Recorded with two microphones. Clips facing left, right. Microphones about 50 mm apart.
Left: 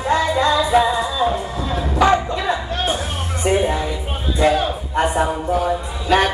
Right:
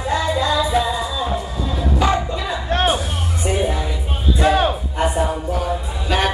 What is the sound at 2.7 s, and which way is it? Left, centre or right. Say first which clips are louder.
Music: right 4 dB; right.